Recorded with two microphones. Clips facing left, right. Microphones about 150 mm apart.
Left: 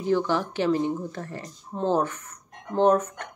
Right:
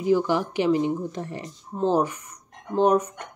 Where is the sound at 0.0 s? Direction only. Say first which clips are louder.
Right 2 dB; 10° right (ahead or behind).